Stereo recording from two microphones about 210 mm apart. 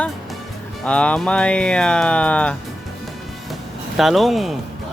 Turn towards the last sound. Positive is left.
turn(degrees=0)  # may be behind; listen again after turning